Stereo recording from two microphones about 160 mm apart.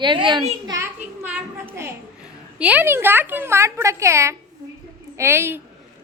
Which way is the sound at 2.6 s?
10° right (ahead or behind).